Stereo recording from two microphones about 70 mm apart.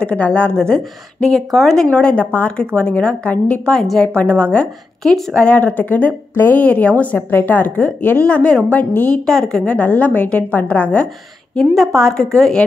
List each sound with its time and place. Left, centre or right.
0.0 s a woman's voice: centre
1.9 s a woman's voice: centre
4.1 s speech: centre
5.0 s speech: centre
5.4 s speech: left
9.2 s a woman's voice: centre
9.8 s speech: left
11.5 s a woman's voice: centre